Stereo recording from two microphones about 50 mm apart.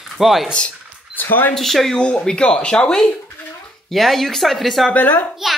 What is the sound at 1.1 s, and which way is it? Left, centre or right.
Speech, left.